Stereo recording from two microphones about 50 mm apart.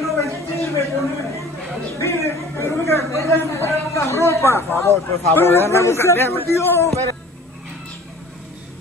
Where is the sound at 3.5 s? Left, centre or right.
Left.